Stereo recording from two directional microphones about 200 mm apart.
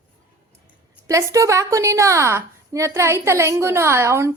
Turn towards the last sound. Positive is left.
turn(degrees=-15)  # may be behind; listen again after turning